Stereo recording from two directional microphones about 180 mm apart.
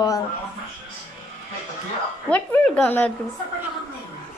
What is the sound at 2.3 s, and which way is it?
Speech, 10° left (ahead or behind).